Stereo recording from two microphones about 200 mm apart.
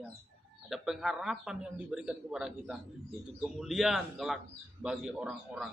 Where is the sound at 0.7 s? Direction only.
Centre (ahead or behind).